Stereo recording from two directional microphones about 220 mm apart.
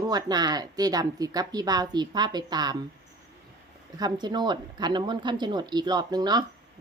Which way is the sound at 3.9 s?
20° right (ahead or behind).